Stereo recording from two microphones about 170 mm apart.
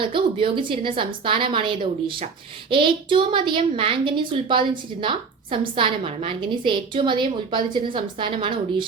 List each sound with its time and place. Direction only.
0.0 s a woman's voice: 30° right (ahead or behind)